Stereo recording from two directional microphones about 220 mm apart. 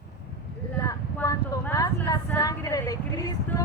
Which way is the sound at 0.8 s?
15° left (ahead or behind).